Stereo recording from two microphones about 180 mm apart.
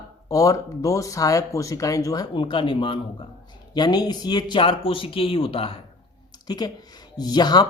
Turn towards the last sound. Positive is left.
turn(degrees=20)  # may be behind; listen again after turning